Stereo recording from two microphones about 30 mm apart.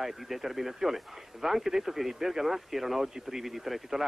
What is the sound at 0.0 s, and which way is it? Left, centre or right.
A man's voice, centre.